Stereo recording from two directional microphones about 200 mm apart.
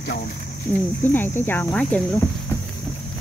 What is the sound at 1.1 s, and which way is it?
Speech, 10° left (ahead or behind).